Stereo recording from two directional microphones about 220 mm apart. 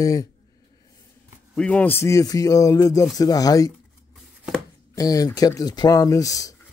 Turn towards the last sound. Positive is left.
turn(degrees=15)  # may be behind; listen again after turning